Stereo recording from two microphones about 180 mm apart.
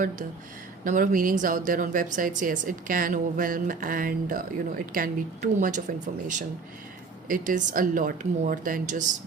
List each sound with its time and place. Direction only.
0.9 s speech: 45° right (ahead or behind)
7.3 s speech: 45° right (ahead or behind)